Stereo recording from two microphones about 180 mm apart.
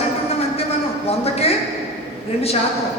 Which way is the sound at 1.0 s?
35° left (ahead or behind).